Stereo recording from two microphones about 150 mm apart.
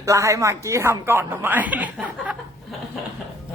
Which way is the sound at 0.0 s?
20° right (ahead or behind).